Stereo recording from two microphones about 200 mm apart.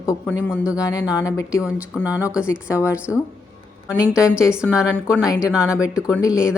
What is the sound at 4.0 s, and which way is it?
Speech, 5° right (ahead or behind).